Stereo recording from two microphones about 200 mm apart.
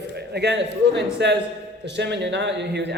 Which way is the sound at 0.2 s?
55° right (ahead or behind).